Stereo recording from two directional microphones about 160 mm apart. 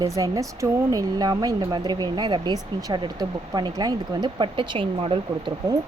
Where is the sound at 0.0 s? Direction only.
20° right (ahead or behind).